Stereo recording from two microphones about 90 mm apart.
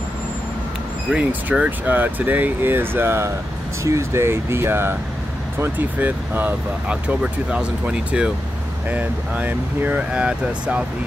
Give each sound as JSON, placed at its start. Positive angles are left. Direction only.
{"t": 1.1, "sound": "speech", "side_deg": -15}